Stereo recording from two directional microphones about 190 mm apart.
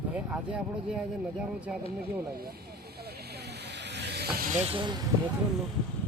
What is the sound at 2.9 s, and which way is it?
Snake, 55° right (ahead or behind).